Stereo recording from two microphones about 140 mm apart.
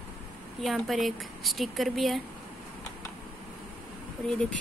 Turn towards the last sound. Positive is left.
turn(degrees=5)  # may be behind; listen again after turning